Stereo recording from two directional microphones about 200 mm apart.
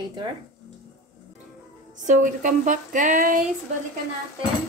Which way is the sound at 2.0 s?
40° right (ahead or behind).